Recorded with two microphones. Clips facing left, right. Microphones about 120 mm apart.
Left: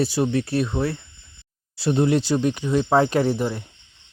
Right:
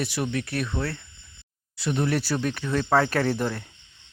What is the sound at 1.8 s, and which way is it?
Speech, 30° left (ahead or behind).